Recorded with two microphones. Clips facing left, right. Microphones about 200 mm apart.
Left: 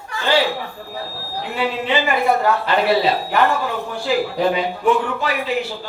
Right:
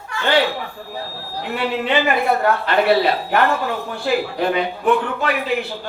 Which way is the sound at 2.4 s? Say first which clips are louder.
Right 1 dB; 60° right (ahead or behind).